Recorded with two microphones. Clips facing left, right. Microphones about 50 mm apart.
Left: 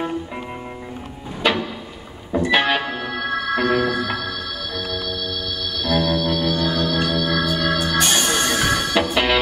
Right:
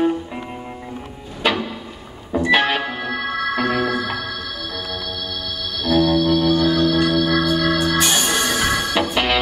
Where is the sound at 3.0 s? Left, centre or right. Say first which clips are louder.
Right 1 dB; right.